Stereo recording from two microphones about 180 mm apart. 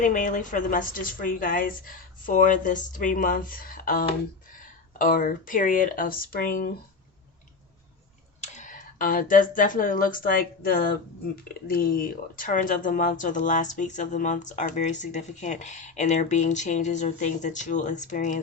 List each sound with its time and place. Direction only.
0.0 s speech: 45° left (ahead or behind)
8.4 s speech: 45° left (ahead or behind)